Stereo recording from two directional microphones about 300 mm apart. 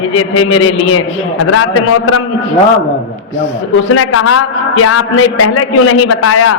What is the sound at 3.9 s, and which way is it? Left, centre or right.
A man's voice, left.